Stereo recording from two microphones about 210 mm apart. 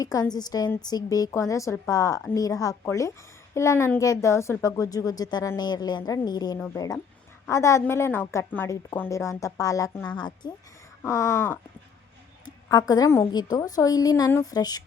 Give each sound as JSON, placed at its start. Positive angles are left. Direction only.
{"t": 0.0, "sound": "speech", "side_deg": 15}
{"t": 12.6, "sound": "speech", "side_deg": 20}